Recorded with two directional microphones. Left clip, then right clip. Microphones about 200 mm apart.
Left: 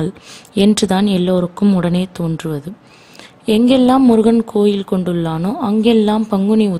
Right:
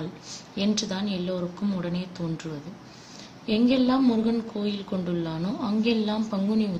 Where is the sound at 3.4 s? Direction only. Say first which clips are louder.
Left 11 dB; 50° left (ahead or behind).